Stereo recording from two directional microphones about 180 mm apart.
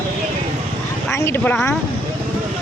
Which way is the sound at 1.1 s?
15° left (ahead or behind).